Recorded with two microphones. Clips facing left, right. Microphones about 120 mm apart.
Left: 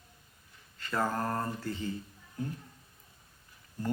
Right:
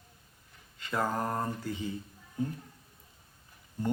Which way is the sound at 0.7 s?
15° right (ahead or behind).